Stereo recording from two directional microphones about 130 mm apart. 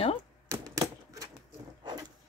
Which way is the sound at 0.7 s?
25° right (ahead or behind).